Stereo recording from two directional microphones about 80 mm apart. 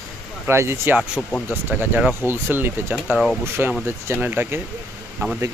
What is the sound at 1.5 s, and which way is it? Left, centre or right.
Speech, right.